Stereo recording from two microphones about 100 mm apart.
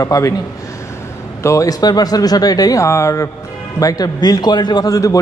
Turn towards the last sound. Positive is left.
turn(degrees=35)  # may be behind; listen again after turning